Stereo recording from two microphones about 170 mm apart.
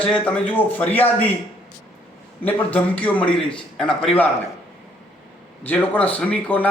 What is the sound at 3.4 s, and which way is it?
Speech, 30° left (ahead or behind).